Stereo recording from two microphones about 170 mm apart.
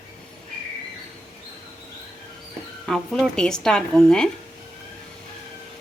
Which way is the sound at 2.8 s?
Centre (ahead or behind).